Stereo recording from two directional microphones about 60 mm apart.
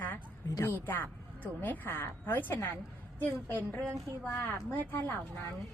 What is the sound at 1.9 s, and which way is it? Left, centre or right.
Speech, left.